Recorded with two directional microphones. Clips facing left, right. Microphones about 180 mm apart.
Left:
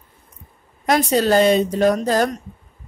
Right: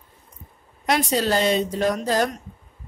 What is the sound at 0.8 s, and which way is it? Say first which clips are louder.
Speech: left 5 dB; 50° left (ahead or behind).